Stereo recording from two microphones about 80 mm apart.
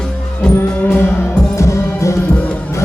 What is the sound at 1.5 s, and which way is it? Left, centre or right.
Music, left.